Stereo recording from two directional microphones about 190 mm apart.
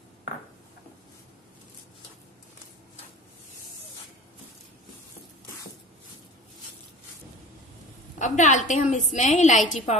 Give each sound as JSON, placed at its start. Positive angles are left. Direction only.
{"t": 8.2, "sound": "a woman's voice", "side_deg": 40}